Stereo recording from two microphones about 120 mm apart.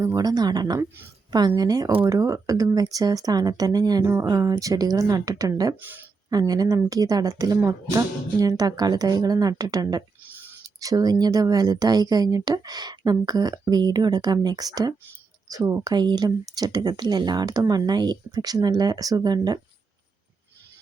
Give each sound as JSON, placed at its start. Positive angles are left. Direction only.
{"t": 0.0, "sound": "speech", "side_deg": -30}
{"t": 5.8, "sound": "speech", "side_deg": -15}
{"t": 6.3, "sound": "speech", "side_deg": -30}
{"t": 10.2, "sound": "a sound", "side_deg": -15}
{"t": 10.8, "sound": "speech", "side_deg": -30}